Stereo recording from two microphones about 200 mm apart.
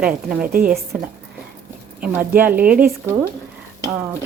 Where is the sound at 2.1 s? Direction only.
10° right (ahead or behind).